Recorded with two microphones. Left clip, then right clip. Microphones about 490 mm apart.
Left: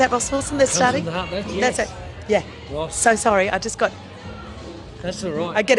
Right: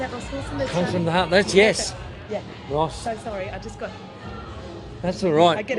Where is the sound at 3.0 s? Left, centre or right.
Left.